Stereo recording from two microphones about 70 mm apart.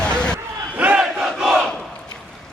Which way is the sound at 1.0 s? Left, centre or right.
Centre.